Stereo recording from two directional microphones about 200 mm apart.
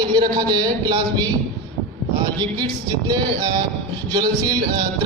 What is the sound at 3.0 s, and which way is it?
A man's voice, 20° right (ahead or behind).